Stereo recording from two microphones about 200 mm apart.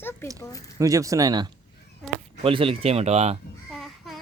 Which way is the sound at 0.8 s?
15° right (ahead or behind).